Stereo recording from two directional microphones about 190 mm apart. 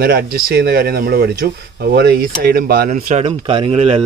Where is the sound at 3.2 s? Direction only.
30° right (ahead or behind).